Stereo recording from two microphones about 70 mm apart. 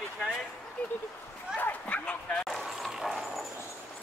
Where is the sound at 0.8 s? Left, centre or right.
Centre.